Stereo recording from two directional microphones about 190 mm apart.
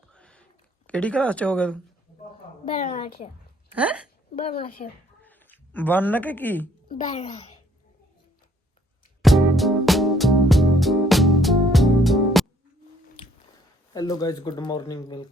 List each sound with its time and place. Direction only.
0.1 s a sound: 5° left (ahead or behind)
0.9 s speech: 5° left (ahead or behind)
2.6 s speech: 30° left (ahead or behind)
3.8 s speech: 5° right (ahead or behind)
4.8 s a child's voice: 35° left (ahead or behind)
5.2 s speech: 10° left (ahead or behind)
6.8 s a child's voice: 45° left (ahead or behind)
9.2 s music: centre (ahead or behind)
13.9 s speech: 20° left (ahead or behind)